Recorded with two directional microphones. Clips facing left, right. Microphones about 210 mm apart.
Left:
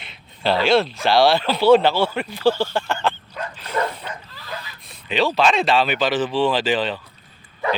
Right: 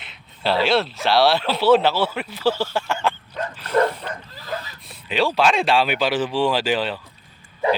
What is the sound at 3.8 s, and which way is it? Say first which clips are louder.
Dog: right 5 dB; 45° right (ahead or behind).